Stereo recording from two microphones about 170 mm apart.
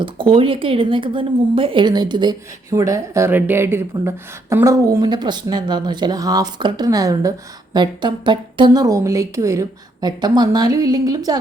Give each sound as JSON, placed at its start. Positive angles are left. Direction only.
{"t": 0.0, "sound": "a woman's voice", "side_deg": -30}